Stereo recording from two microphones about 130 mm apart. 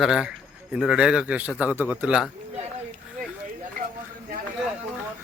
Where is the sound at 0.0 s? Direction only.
5° right (ahead or behind).